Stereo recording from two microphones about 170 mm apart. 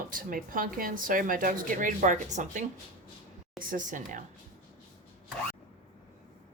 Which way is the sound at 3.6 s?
50° right (ahead or behind).